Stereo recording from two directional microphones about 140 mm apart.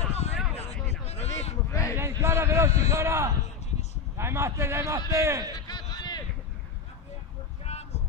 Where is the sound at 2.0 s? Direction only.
20° right (ahead or behind).